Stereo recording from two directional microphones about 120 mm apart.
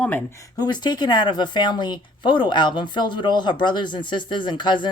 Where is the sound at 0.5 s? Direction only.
35° left (ahead or behind).